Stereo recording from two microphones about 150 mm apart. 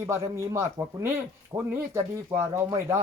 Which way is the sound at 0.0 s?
20° right (ahead or behind).